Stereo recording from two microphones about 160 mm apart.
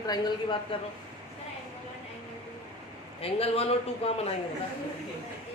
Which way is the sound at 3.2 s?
40° left (ahead or behind).